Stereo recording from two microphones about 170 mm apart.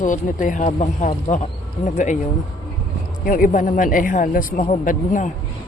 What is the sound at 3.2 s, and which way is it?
Speech, 55° left (ahead or behind).